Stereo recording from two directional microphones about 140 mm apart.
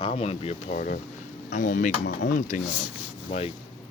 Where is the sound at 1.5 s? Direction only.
65° left (ahead or behind).